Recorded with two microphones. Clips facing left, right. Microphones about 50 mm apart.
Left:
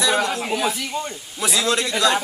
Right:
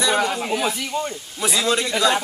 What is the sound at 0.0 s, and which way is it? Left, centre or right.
A man's voice, centre.